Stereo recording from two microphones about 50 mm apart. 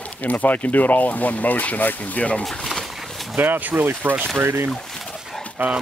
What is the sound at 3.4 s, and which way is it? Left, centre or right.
Speech, right.